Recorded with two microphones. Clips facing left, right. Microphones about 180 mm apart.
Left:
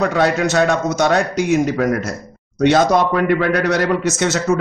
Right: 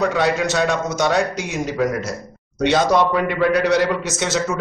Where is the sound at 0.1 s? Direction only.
50° left (ahead or behind).